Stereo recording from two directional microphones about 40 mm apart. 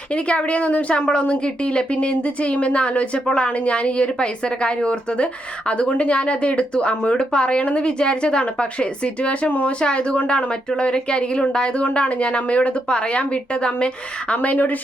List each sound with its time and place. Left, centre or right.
0.1 s a woman's voice: left